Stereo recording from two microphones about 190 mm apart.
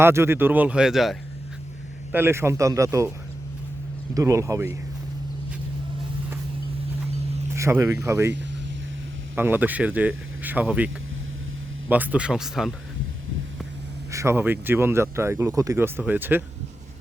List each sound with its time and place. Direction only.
0.0 s speech: 15° right (ahead or behind)
2.1 s speech: 15° right (ahead or behind)
4.1 s speech: 15° right (ahead or behind)
7.5 s speech: 15° right (ahead or behind)
9.3 s speech: 10° right (ahead or behind)
14.1 s speech: 15° right (ahead or behind)